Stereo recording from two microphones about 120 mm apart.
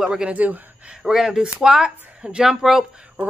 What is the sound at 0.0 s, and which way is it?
Speech, 5° right (ahead or behind).